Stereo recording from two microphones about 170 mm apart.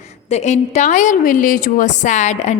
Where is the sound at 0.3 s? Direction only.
40° left (ahead or behind).